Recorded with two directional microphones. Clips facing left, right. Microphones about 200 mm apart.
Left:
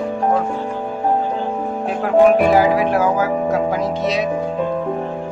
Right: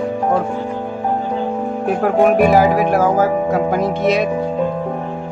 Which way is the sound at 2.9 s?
50° right (ahead or behind).